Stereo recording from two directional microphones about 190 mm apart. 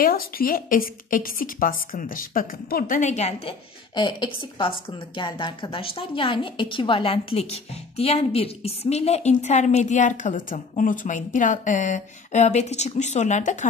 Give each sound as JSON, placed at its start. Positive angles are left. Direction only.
{"t": 0.0, "sound": "a woman's voice", "side_deg": 50}
{"t": 3.9, "sound": "a woman's voice", "side_deg": 25}